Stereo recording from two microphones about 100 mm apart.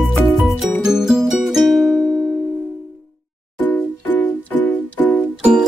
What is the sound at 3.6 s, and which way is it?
Music, 15° left (ahead or behind).